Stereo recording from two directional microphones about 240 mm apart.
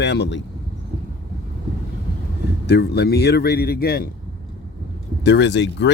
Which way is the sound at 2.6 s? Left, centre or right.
Left.